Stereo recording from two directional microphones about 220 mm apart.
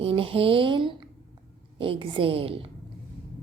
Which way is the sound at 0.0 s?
25° right (ahead or behind).